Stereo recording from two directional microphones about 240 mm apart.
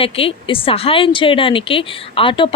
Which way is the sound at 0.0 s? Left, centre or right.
Left.